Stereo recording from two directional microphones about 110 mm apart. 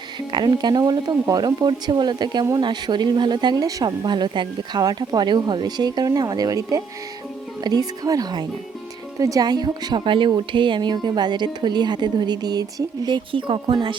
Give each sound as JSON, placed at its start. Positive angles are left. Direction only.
{"t": 0.3, "sound": "speech", "side_deg": -40}